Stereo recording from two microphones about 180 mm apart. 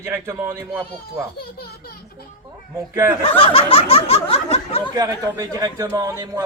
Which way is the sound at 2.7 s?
15° right (ahead or behind).